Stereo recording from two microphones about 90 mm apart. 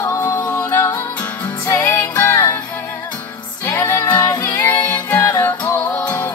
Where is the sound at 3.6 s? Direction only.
30° left (ahead or behind).